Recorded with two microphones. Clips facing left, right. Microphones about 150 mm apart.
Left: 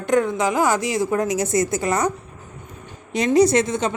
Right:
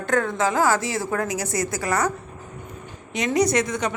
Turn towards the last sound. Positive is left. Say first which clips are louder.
# left 4 dB
turn(degrees=25)  # may be behind; listen again after turning